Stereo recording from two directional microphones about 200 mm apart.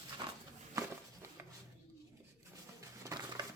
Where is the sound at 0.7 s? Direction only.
15° right (ahead or behind).